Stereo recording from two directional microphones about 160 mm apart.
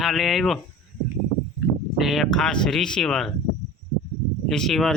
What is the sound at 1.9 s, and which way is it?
Speech, centre (ahead or behind).